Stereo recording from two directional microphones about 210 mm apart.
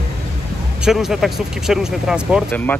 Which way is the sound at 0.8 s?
Centre (ahead or behind).